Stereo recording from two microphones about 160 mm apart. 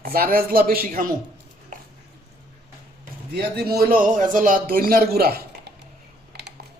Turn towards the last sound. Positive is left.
turn(degrees=-75)  # may be behind; listen again after turning